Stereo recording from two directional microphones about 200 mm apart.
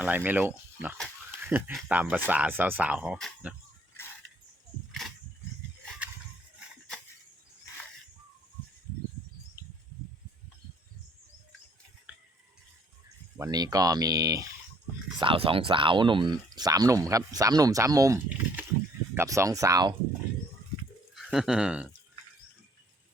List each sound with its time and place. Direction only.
0.0 s speech: 10° right (ahead or behind)
4.9 s wild animals: centre (ahead or behind)
13.5 s speech: 20° right (ahead or behind)
21.2 s speech: centre (ahead or behind)